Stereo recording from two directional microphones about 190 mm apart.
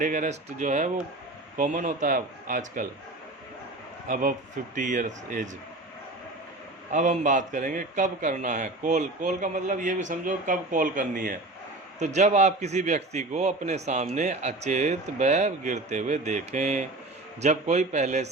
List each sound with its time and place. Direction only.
0.0 s a man's voice: 40° right (ahead or behind)
4.1 s a man's voice: 45° right (ahead or behind)
6.9 s a man's voice: 40° right (ahead or behind)